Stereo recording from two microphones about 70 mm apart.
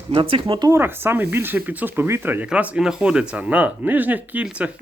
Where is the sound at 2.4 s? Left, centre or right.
Centre.